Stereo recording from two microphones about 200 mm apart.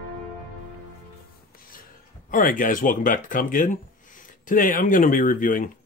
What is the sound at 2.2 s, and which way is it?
Speech, 45° left (ahead or behind).